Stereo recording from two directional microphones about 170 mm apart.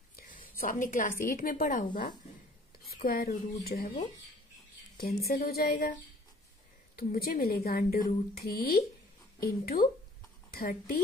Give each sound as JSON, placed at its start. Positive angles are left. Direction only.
{"t": 0.4, "sound": "a woman's voice", "side_deg": 55}
{"t": 2.9, "sound": "a woman's voice", "side_deg": 60}
{"t": 4.9, "sound": "a woman's voice", "side_deg": 65}
{"t": 7.0, "sound": "a woman's voice", "side_deg": 65}